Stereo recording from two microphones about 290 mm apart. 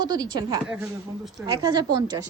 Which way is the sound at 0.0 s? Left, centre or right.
Centre.